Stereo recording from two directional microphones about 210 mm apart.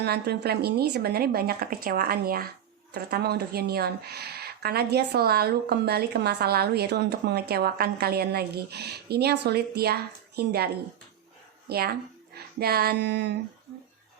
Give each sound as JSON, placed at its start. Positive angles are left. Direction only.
{"t": 0.0, "sound": "speech", "side_deg": -50}
{"t": 11.7, "sound": "speech", "side_deg": -50}